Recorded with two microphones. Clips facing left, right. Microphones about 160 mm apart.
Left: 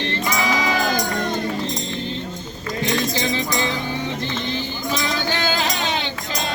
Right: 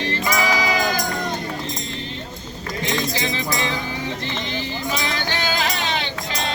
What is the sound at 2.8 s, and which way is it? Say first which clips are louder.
Music: left 2 dB; 35° left (ahead or behind).